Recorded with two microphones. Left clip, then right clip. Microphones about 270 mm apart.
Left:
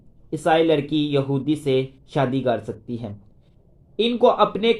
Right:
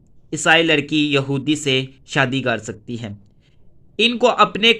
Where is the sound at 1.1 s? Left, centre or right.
Right.